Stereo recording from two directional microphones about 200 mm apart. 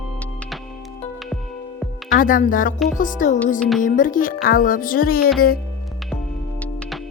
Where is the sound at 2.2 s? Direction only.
45° left (ahead or behind).